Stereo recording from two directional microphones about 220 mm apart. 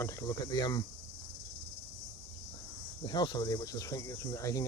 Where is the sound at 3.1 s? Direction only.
20° left (ahead or behind).